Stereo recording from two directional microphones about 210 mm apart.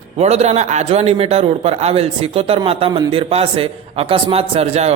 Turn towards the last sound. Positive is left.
turn(degrees=-30)  # may be behind; listen again after turning